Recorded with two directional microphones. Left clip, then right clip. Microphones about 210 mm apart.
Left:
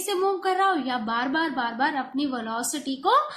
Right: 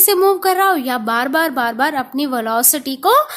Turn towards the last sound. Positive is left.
turn(degrees=-55)  # may be behind; listen again after turning